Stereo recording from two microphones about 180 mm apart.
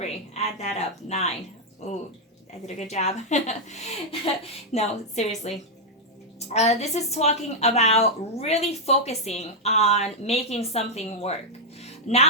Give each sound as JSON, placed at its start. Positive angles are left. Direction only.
{"t": 0.0, "sound": "a woman's voice", "side_deg": 35}
{"t": 2.6, "sound": "a woman's voice", "side_deg": 40}
{"t": 6.5, "sound": "a woman's voice", "side_deg": 40}
{"t": 11.8, "sound": "music", "side_deg": 35}